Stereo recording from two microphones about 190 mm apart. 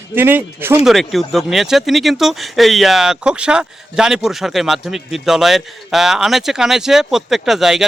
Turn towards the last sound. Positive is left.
turn(degrees=0)  # may be behind; listen again after turning